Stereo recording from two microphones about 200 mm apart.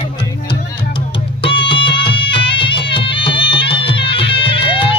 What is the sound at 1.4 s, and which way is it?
Music, 25° left (ahead or behind).